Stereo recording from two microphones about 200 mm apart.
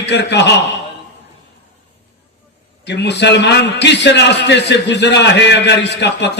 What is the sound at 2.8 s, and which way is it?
A man's voice, 60° left (ahead or behind).